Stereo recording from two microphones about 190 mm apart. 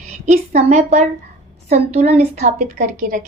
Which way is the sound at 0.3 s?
40° right (ahead or behind).